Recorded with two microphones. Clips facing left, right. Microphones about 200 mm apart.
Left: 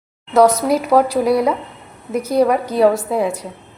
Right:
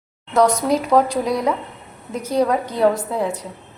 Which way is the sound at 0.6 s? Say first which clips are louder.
Left 2 dB; 10° left (ahead or behind).